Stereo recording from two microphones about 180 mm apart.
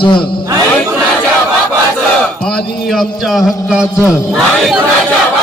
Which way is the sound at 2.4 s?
Centre (ahead or behind).